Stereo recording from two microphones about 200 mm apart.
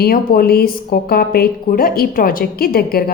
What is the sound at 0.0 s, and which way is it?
Speech, 45° left (ahead or behind).